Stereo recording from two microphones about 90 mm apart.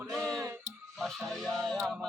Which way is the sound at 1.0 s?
Centre (ahead or behind).